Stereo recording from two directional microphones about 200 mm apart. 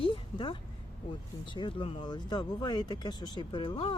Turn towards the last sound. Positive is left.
turn(degrees=25)  # may be behind; listen again after turning